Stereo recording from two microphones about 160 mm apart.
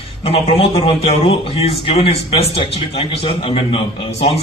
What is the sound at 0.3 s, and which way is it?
A man's voice, 35° left (ahead or behind).